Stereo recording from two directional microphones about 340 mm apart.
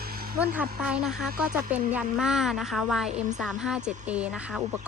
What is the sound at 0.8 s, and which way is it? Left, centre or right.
Speech, centre.